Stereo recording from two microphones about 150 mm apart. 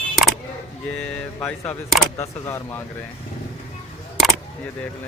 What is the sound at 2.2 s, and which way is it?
Speech, 15° left (ahead or behind).